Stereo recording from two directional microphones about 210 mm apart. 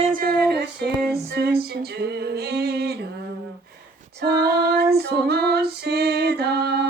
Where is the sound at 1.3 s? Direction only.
50° right (ahead or behind).